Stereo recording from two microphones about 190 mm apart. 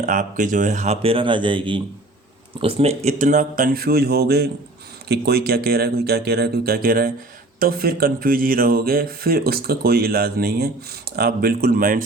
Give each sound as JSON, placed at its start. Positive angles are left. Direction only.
{"t": 0.0, "sound": "speech", "side_deg": -45}